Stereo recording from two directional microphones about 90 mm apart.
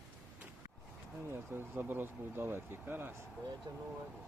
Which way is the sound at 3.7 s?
45° right (ahead or behind).